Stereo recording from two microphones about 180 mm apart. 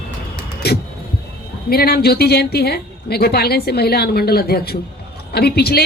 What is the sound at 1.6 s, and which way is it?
A woman's voice, 60° left (ahead or behind).